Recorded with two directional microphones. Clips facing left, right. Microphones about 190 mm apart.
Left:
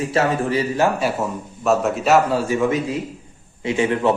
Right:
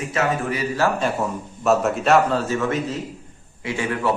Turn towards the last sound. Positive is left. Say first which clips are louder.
# left 5 dB
turn(degrees=20)  # may be behind; listen again after turning